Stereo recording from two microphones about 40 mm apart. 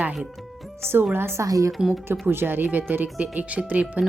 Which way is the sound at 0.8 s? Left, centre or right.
Right.